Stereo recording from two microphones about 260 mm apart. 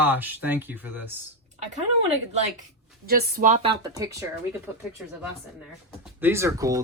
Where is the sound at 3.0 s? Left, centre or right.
Right.